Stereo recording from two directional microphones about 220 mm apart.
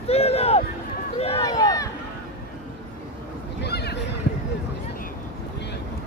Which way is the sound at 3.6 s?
50° left (ahead or behind).